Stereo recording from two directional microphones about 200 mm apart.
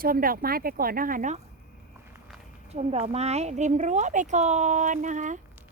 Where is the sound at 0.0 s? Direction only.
45° right (ahead or behind).